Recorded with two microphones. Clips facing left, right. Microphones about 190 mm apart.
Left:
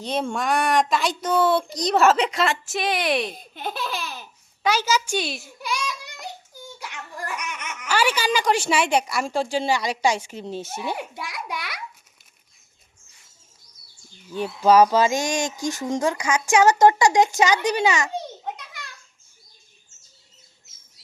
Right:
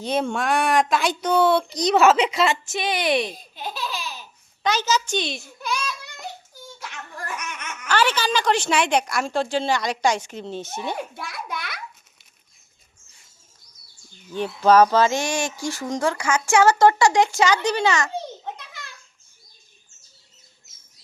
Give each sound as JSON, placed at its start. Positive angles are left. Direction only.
{"t": 0.0, "sound": "speech", "side_deg": 0}
{"t": 3.3, "sound": "laughter", "side_deg": 55}
{"t": 4.6, "sound": "a child's voice", "side_deg": 10}
{"t": 14.3, "sound": "speech", "side_deg": 5}